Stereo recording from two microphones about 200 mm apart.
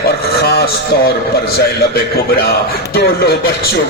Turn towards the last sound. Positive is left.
turn(degrees=50)  # may be behind; listen again after turning